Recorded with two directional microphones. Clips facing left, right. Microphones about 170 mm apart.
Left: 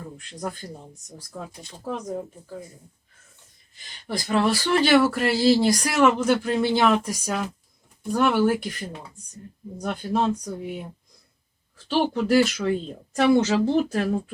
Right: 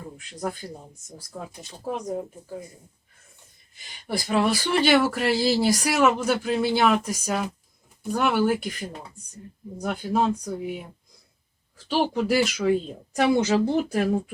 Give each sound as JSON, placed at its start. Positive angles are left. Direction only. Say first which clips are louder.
{"t": 1.4, "sound": "speech", "louder": "even", "side_deg": -10}
{"t": 3.8, "sound": "speech", "louder": "right 1 dB", "side_deg": -10}
{"t": 11.9, "sound": "speech", "louder": "left 1 dB", "side_deg": -5}
{"t": 13.1, "sound": "speech", "louder": "left 2 dB", "side_deg": -10}